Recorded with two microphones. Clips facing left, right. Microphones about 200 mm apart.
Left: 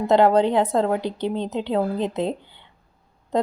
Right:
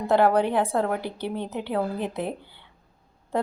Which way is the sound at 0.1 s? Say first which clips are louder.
Left 3 dB; 20° left (ahead or behind).